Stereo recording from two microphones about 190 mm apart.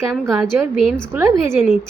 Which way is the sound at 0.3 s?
15° right (ahead or behind).